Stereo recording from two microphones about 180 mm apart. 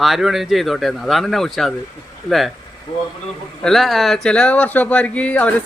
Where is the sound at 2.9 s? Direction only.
30° left (ahead or behind).